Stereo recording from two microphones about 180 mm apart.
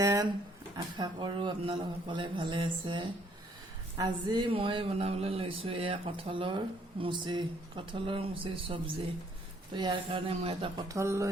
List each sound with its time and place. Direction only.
0.0 s a sound: 20° right (ahead or behind)
0.9 s speech: 25° right (ahead or behind)
10.8 s speech: 15° right (ahead or behind)